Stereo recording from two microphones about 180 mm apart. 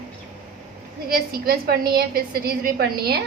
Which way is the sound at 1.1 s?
55° right (ahead or behind).